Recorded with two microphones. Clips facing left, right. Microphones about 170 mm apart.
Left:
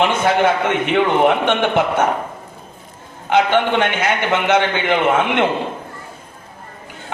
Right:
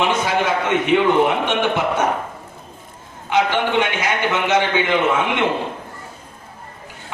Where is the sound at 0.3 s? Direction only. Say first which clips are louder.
Left 4 dB; 60° left (ahead or behind).